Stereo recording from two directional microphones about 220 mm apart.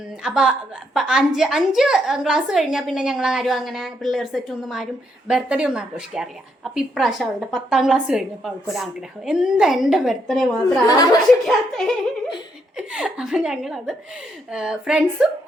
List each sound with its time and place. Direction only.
0.2 s a woman's voice: 5° right (ahead or behind)
10.8 s speech: 15° left (ahead or behind)
11.3 s a woman's voice: centre (ahead or behind)